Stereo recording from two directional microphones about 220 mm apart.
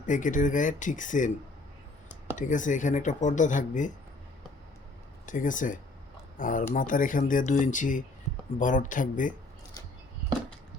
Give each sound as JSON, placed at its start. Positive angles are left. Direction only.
{"t": 0.0, "sound": "speech", "side_deg": 35}
{"t": 2.3, "sound": "speech", "side_deg": 35}
{"t": 5.2, "sound": "speech", "side_deg": 35}